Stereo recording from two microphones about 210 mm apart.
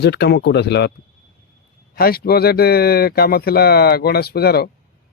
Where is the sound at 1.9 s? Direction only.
45° left (ahead or behind).